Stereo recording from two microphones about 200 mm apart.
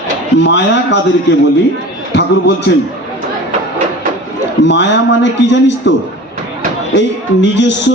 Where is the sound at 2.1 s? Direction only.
60° left (ahead or behind).